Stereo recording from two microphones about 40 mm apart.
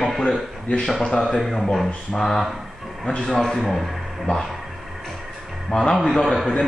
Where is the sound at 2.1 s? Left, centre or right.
Centre.